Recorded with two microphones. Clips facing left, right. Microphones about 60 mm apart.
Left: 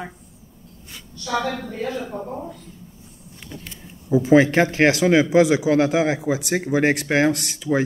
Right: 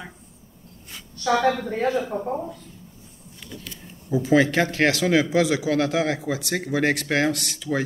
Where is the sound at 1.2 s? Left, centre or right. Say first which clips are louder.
Right 4 dB; right.